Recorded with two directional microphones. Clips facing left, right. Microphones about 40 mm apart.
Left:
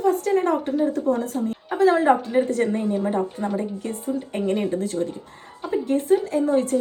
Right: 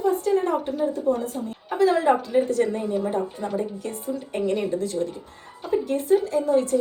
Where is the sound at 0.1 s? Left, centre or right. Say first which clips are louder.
Left 1 dB; left.